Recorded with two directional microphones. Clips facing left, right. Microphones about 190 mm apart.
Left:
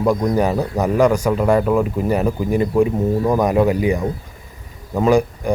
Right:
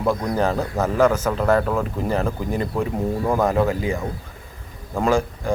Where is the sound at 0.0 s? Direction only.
15° left (ahead or behind).